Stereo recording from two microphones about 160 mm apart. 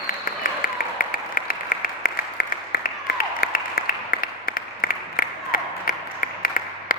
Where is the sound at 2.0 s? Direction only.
65° left (ahead or behind).